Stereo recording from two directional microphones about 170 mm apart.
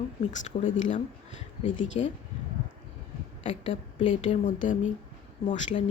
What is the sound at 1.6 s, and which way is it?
Speech, 90° left.